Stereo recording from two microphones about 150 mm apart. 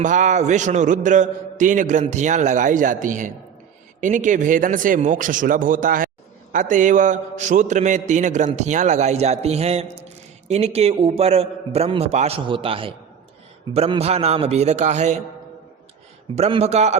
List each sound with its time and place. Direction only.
0.0 s a man's voice: 55° right (ahead or behind)
16.3 s a man's voice: 45° right (ahead or behind)